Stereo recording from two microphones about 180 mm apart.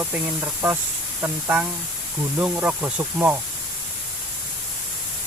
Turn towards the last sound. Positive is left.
turn(degrees=-10)  # may be behind; listen again after turning